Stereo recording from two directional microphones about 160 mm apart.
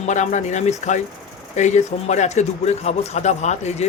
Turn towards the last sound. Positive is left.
turn(degrees=45)  # may be behind; listen again after turning